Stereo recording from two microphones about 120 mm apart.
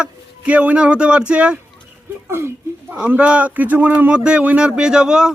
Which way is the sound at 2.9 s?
10° right (ahead or behind).